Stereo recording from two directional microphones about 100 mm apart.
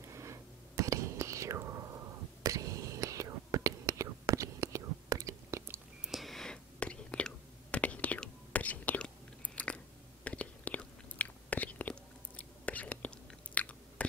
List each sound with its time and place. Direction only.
0.1 s whispering: 30° right (ahead or behind)
6.0 s whispering: centre (ahead or behind)
9.6 s chewing: 15° left (ahead or behind)